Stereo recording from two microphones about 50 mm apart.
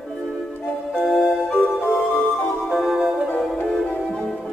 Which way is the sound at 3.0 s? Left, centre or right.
Centre.